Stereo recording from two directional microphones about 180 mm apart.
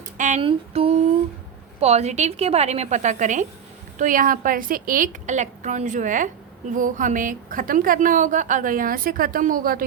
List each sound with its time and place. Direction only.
0.2 s music: 40° right (ahead or behind)
0.4 s a woman's voice: 35° right (ahead or behind); by 9.8 s 50° right (ahead or behind)